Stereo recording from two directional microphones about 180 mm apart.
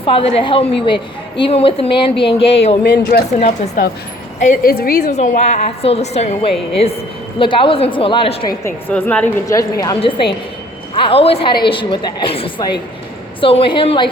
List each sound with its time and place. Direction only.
0.0 s a woman's voice: 30° left (ahead or behind)
2.8 s speech: 65° left (ahead or behind)
5.1 s a woman's voice: 40° left (ahead or behind)
8.6 s a woman's voice: 10° left (ahead or behind); by 14.1 s 30° left (ahead or behind)